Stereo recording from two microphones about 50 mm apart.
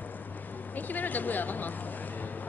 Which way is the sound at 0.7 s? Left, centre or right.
Left.